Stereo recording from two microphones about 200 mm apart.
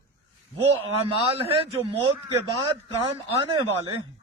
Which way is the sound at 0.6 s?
30° right (ahead or behind).